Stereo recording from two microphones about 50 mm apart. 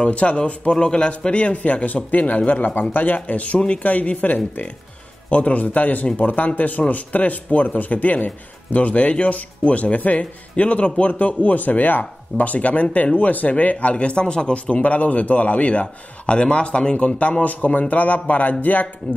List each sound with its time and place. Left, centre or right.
0.0 s speech: left
3.5 s speech: left
3.9 s speech: left